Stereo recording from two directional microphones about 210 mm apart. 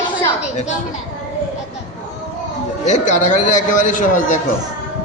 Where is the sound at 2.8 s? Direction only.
35° left (ahead or behind).